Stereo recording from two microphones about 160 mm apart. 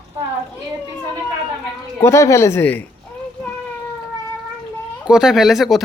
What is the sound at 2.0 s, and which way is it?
Speech, 20° left (ahead or behind).